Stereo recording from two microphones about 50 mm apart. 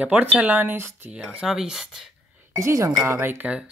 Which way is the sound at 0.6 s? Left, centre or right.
Right.